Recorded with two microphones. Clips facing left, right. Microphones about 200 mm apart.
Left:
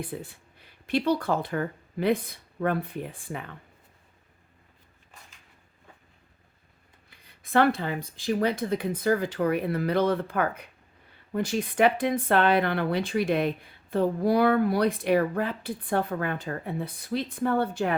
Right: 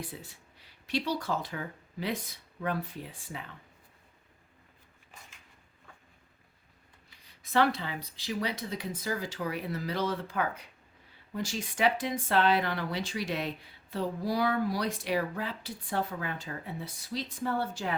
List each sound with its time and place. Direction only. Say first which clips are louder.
0.0 s speech: left 7 dB; 55° left (ahead or behind)
7.1 s speech: left 5 dB; 55° left (ahead or behind)